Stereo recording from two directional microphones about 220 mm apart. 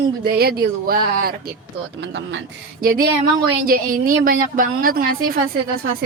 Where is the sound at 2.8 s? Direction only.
40° right (ahead or behind).